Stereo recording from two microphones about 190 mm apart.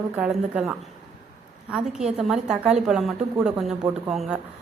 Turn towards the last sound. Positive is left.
turn(degrees=0)  # may be behind; listen again after turning